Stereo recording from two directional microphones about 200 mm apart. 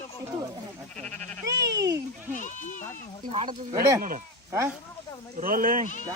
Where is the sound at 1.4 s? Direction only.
15° right (ahead or behind).